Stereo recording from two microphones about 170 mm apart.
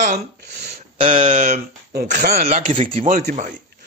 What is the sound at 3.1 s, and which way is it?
Speech, 55° right (ahead or behind).